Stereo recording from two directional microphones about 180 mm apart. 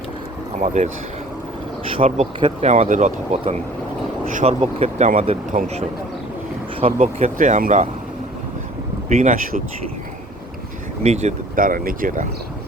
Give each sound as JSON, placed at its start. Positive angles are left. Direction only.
{"t": 0.6, "sound": "speech", "side_deg": -40}
{"t": 1.9, "sound": "speech", "side_deg": -35}
{"t": 7.3, "sound": "speech", "side_deg": -45}
{"t": 9.0, "sound": "speech", "side_deg": -40}
{"t": 11.0, "sound": "speech", "side_deg": -40}